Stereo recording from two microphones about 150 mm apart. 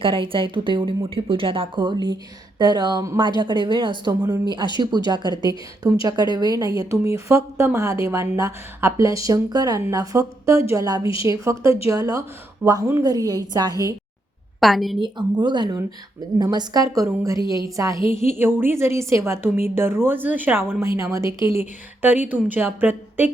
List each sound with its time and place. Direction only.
0.0 s speech: 35° right (ahead or behind)
14.6 s a woman's voice: centre (ahead or behind)
14.9 s a woman's voice: 30° right (ahead or behind); by 23.3 s 10° right (ahead or behind)